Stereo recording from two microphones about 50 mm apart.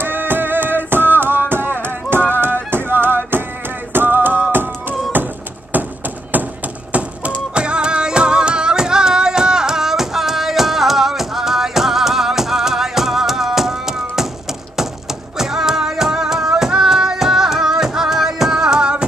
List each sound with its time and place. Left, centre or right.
0.0 s music: right
3.9 s a sound: right
7.5 s music: centre
15.3 s music: centre